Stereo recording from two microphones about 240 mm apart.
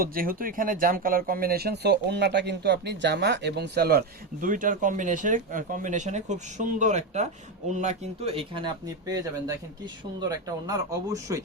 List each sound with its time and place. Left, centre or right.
0.0 s speech: right; by 11.4 s centre